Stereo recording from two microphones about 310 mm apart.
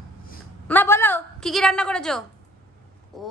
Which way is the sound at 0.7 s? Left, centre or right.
Centre.